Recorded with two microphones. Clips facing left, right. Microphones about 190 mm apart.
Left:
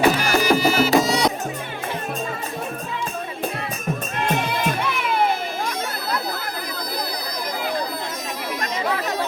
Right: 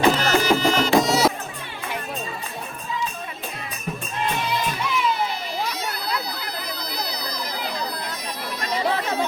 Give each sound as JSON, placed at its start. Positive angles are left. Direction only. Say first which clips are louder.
{"t": 0.2, "sound": "music", "louder": "left 1 dB", "side_deg": 10}
{"t": 4.2, "sound": "music", "louder": "left 2 dB", "side_deg": 50}